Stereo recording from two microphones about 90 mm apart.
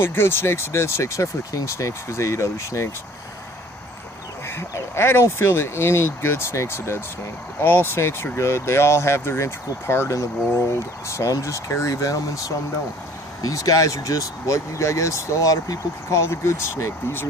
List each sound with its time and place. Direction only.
0.0 s speech: 25° left (ahead or behind)
4.4 s speech: 30° left (ahead or behind)